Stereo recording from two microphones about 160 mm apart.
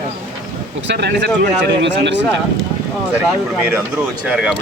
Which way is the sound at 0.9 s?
90° right.